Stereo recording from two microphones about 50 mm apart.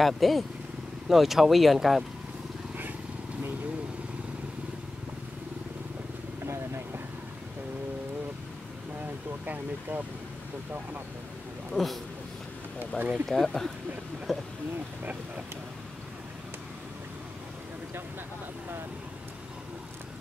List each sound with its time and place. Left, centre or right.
0.0 s speech: centre
6.4 s vehicle: right
9.0 s speech: right
11.7 s speech: centre
12.9 s speech: centre